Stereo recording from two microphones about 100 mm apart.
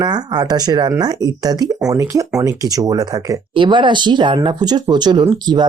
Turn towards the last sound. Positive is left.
turn(degrees=-45)  # may be behind; listen again after turning